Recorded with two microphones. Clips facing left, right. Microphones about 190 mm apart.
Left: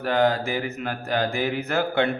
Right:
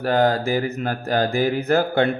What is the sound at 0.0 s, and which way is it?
Speech, 40° right (ahead or behind).